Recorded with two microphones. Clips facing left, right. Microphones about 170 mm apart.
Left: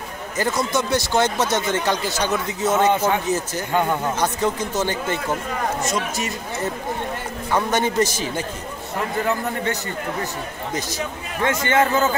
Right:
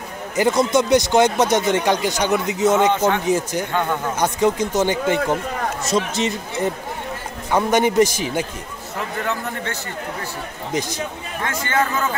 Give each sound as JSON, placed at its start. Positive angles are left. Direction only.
{"t": 0.4, "sound": "speech", "side_deg": -20}
{"t": 5.9, "sound": "speech", "side_deg": -25}
{"t": 10.7, "sound": "speech", "side_deg": -15}
{"t": 11.4, "sound": "a man's voice", "side_deg": 20}